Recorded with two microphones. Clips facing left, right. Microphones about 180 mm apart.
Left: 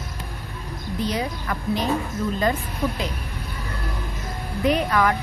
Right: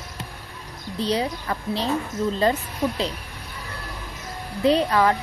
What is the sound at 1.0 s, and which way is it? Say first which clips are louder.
Speech: right 3 dB; 30° right (ahead or behind).